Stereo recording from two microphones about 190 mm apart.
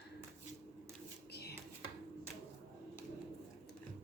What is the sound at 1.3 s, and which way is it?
Dishes, 60° left (ahead or behind).